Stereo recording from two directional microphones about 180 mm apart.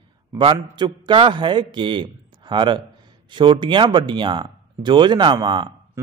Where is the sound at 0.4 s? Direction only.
30° right (ahead or behind).